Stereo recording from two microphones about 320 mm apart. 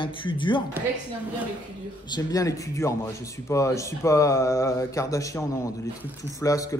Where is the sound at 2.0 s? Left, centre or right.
Centre.